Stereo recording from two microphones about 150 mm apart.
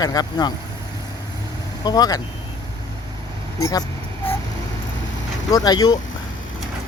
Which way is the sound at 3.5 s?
20° left (ahead or behind).